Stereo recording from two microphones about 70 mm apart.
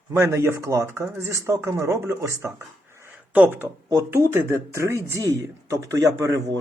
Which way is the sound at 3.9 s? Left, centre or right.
Right.